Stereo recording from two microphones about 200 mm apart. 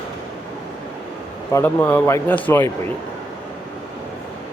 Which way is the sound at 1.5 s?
10° left (ahead or behind).